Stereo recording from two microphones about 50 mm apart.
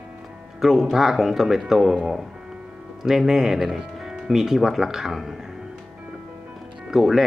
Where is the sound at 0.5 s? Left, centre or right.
Centre.